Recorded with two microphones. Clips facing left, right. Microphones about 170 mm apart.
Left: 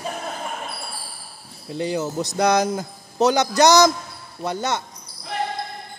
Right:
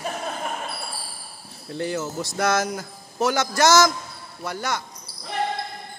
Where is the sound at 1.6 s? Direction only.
15° left (ahead or behind).